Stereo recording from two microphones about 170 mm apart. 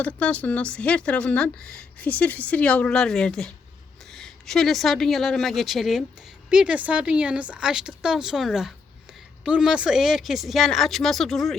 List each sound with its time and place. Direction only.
0.0 s speech: 5° left (ahead or behind)